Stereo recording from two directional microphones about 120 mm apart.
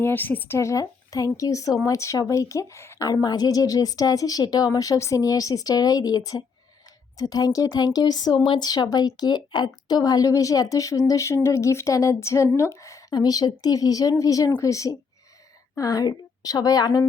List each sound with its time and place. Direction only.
0.0 s a woman's voice: 15° left (ahead or behind); by 17.1 s 30° left (ahead or behind)